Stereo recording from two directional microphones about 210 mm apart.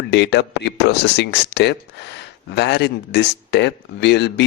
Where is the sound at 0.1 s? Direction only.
55° left (ahead or behind).